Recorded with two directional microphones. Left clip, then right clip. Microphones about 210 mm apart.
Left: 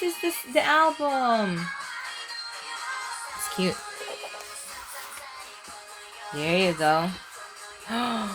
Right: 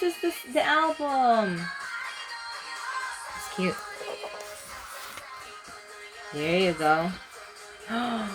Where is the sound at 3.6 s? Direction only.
40° left (ahead or behind).